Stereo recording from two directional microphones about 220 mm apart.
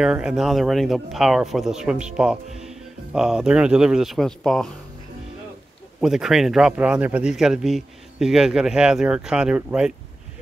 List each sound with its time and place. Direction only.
0.0 s speech: 5° right (ahead or behind)
5.9 s speech: centre (ahead or behind)